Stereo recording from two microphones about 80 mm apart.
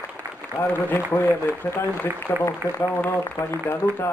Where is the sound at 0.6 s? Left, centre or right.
Left.